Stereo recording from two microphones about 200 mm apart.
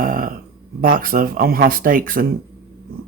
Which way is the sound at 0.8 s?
45° right (ahead or behind).